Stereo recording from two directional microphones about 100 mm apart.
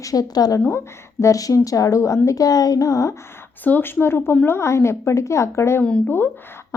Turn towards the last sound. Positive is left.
turn(degrees=20)  # may be behind; listen again after turning